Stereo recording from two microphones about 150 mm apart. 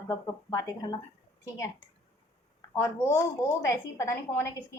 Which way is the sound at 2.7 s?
20° left (ahead or behind).